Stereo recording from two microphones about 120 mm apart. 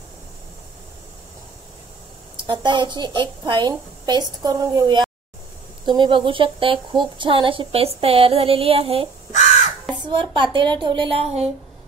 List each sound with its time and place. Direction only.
2.4 s a woman's voice: 40° right (ahead or behind)
9.3 s speech: 70° left (ahead or behind)
10.0 s a woman's voice: 40° right (ahead or behind)